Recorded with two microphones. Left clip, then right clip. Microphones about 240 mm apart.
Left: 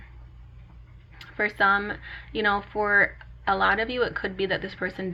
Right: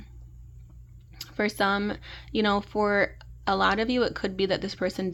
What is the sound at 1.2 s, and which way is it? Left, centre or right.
Speech, right.